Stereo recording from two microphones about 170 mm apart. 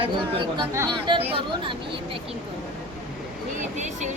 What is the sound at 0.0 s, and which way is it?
A woman's voice, 30° right (ahead or behind).